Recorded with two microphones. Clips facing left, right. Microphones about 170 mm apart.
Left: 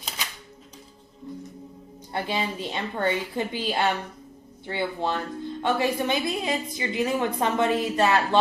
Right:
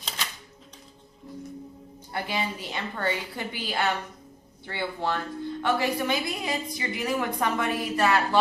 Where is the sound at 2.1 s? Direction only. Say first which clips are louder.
Left 2 dB; 25° left (ahead or behind).